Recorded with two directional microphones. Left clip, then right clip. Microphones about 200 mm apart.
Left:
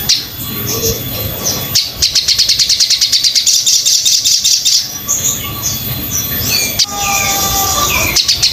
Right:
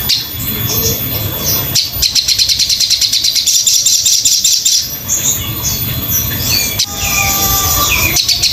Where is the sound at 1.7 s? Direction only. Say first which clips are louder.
Left 1 dB; 20° left (ahead or behind).